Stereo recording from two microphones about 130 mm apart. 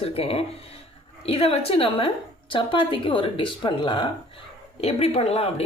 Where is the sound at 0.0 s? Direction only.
50° left (ahead or behind).